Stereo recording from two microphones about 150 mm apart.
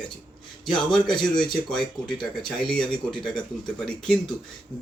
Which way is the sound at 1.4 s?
5° left (ahead or behind).